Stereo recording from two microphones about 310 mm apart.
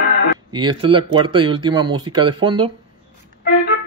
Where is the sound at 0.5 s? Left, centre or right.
Centre.